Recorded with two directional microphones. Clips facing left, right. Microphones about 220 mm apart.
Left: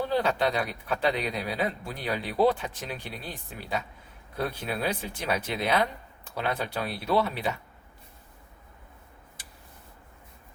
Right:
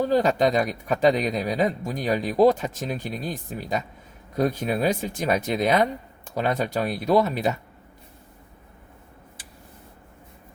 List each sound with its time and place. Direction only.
0.0 s a man's voice: 45° right (ahead or behind)